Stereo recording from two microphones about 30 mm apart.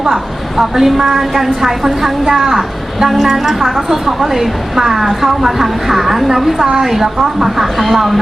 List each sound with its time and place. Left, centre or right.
0.0 s a woman's voice: centre